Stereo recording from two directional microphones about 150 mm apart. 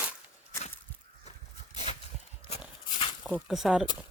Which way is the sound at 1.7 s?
45° left (ahead or behind).